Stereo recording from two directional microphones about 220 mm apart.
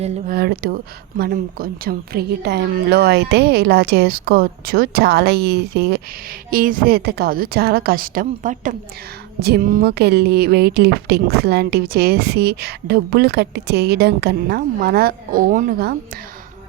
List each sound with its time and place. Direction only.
0.0 s a woman's voice: 40° right (ahead or behind)